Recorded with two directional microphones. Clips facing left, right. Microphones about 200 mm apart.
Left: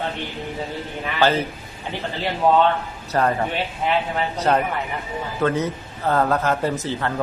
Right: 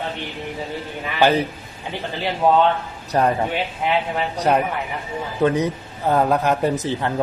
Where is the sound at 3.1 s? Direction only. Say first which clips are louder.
Right 2 dB; 15° right (ahead or behind).